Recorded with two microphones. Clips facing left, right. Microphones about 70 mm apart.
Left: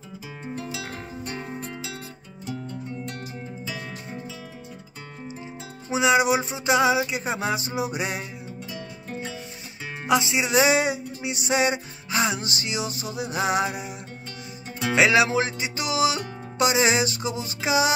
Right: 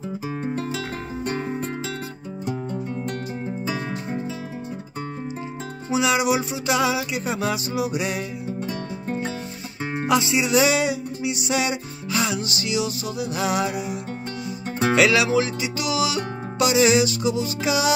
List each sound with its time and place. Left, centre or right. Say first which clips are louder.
0.5 s music: right 2 dB; right
5.9 s music: left 1 dB; left
10.0 s music: right 1 dB; centre
15.0 s music: even; left